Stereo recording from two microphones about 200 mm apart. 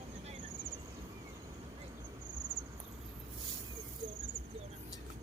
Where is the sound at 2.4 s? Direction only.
20° right (ahead or behind).